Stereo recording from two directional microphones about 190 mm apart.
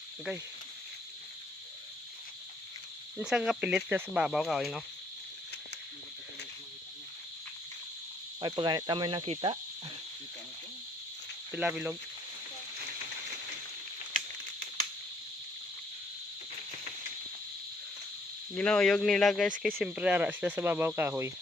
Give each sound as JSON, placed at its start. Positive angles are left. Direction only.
{"t": 3.2, "sound": "speech", "side_deg": -5}
{"t": 8.4, "sound": "speech", "side_deg": -20}
{"t": 11.5, "sound": "speech", "side_deg": -5}
{"t": 18.5, "sound": "speech", "side_deg": 5}